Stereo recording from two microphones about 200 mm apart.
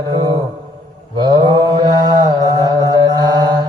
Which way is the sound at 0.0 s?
20° right (ahead or behind).